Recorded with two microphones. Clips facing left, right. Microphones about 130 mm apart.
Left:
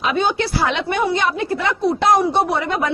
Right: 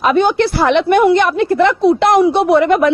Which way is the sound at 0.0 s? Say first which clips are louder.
Right 7 dB; 55° right (ahead or behind).